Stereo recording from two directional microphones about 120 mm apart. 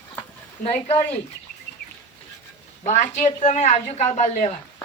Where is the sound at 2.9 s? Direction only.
80° left.